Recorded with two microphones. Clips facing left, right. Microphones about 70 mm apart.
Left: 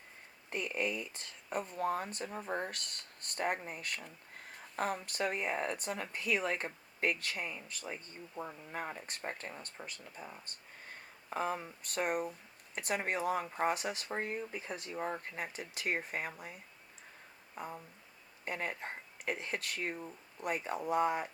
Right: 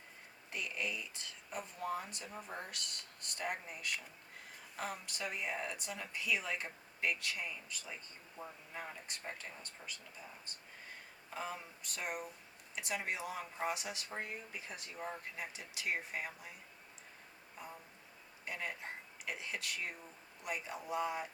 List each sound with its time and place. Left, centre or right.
0.5 s speech: left
11.3 s speech: left
17.6 s speech: left